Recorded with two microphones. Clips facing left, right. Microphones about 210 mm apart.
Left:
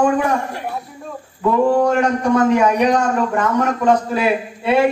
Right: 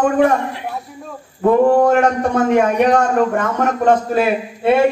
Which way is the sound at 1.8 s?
50° right (ahead or behind).